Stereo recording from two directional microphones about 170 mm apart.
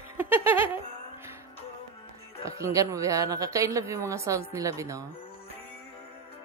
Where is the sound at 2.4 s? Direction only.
20° right (ahead or behind).